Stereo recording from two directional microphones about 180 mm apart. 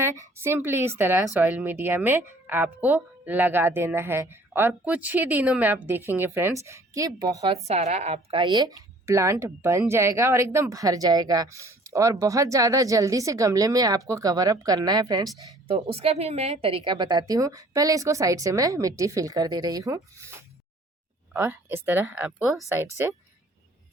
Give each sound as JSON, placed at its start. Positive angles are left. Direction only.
{"t": 0.0, "sound": "a woman's voice", "side_deg": -15}
{"t": 7.4, "sound": "speech", "side_deg": -35}
{"t": 15.7, "sound": "speech", "side_deg": -35}
{"t": 21.3, "sound": "a woman's voice", "side_deg": -10}